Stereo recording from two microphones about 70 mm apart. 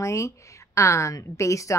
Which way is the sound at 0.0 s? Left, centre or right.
Left.